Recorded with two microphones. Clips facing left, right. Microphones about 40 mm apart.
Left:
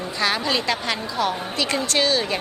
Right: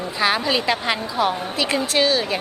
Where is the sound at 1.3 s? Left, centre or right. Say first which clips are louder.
Right 2 dB; centre.